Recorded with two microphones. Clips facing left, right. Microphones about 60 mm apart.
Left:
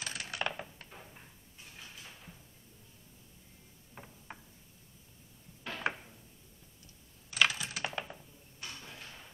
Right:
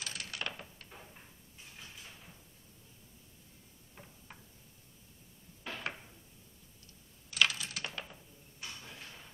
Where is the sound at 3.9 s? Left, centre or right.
Left.